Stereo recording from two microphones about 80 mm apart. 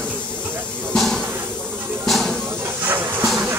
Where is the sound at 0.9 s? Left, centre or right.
Centre.